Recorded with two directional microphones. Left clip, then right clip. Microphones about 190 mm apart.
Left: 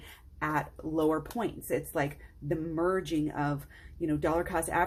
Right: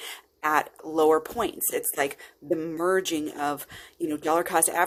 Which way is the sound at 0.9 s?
35° right (ahead or behind).